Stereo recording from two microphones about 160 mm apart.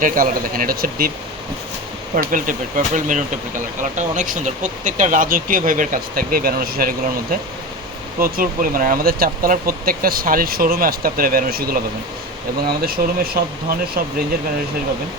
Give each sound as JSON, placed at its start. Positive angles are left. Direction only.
{"t": 0.0, "sound": "speech", "side_deg": -60}
{"t": 2.1, "sound": "speech", "side_deg": -55}
{"t": 12.8, "sound": "speech", "side_deg": -70}